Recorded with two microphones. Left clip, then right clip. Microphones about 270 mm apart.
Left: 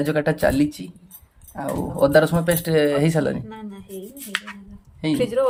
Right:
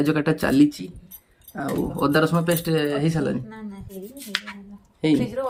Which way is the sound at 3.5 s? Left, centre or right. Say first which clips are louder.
Left 2 dB; left.